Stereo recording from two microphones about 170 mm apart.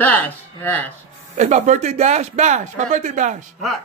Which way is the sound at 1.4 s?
45° right (ahead or behind).